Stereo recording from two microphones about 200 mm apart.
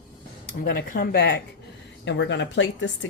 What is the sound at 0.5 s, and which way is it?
Speech, 45° left (ahead or behind).